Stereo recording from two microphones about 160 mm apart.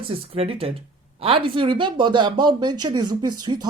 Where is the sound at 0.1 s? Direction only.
35° right (ahead or behind).